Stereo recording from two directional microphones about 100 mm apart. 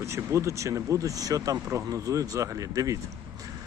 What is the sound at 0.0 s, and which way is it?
Speech, 30° right (ahead or behind).